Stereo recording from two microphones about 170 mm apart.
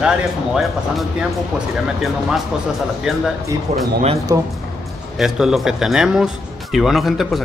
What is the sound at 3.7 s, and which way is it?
Speech, 40° right (ahead or behind).